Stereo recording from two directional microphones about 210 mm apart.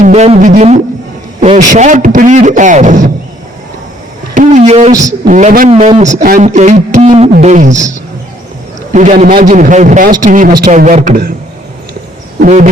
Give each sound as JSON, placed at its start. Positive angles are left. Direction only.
{"t": 0.0, "sound": "music", "side_deg": -35}
{"t": 1.4, "sound": "a man's voice", "side_deg": -35}
{"t": 4.4, "sound": "a sound", "side_deg": -35}
{"t": 5.0, "sound": "a man's voice", "side_deg": -35}
{"t": 8.9, "sound": "a man's voice", "side_deg": -35}
{"t": 12.4, "sound": "a man's voice", "side_deg": -35}